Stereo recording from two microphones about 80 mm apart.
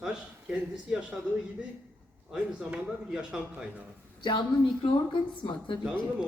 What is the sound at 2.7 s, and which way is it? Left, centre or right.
Speech, centre.